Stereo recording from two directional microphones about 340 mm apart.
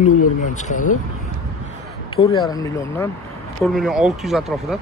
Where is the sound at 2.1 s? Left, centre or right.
Centre.